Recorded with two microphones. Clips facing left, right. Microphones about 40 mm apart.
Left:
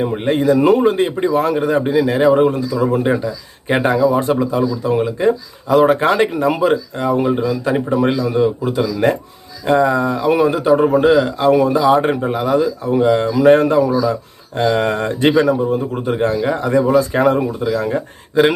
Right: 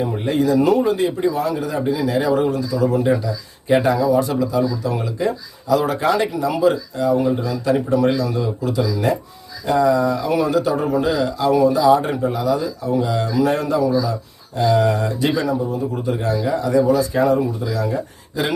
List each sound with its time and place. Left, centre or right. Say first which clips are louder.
0.0 s speech: left 3 dB; left